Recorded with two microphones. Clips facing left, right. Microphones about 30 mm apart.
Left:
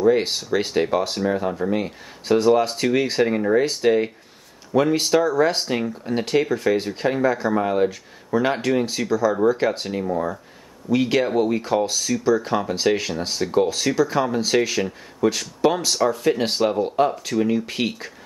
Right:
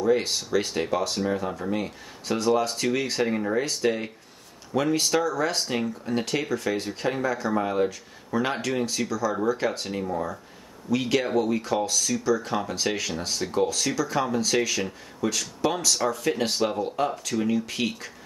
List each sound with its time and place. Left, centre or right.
0.0 s speech: left
16.0 s speech: centre
16.3 s speech: centre